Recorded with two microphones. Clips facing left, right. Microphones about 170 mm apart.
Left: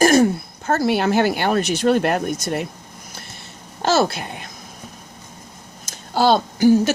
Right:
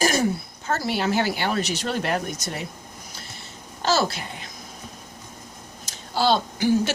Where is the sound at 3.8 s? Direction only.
55° left (ahead or behind).